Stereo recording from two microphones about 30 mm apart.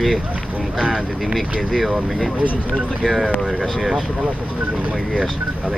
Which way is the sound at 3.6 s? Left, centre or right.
Centre.